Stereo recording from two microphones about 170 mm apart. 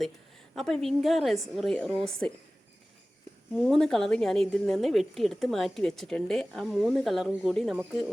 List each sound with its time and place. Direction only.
0.5 s a woman's voice: centre (ahead or behind)
3.5 s a woman's voice: 5° left (ahead or behind)